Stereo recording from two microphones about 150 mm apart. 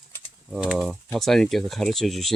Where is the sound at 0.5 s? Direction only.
5° right (ahead or behind).